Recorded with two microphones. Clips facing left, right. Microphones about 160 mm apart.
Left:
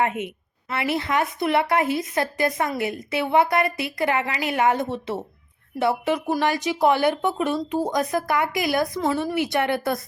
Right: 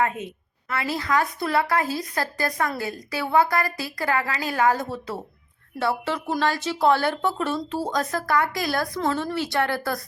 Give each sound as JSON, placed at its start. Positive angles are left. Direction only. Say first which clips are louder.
{"t": 0.0, "sound": "a woman's voice", "louder": "left 1 dB", "side_deg": 20}